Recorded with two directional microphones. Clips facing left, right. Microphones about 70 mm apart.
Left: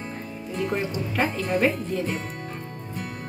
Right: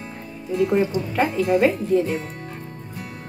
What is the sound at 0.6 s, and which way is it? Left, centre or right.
Speech, centre.